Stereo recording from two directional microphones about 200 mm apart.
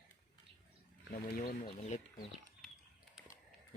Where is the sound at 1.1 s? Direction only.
45° left (ahead or behind).